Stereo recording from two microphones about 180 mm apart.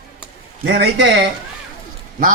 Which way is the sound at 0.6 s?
75° right (ahead or behind).